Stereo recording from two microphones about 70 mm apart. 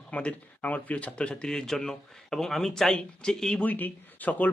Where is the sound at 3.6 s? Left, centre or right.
Left.